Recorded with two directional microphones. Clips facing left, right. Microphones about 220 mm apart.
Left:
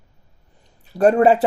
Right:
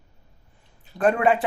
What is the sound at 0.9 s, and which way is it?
Speech, 40° left (ahead or behind).